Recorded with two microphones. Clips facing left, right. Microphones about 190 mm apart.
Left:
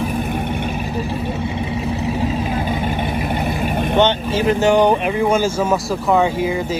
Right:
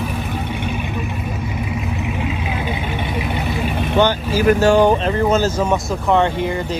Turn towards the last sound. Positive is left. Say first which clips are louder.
# even
turn(degrees=5)  # may be behind; listen again after turning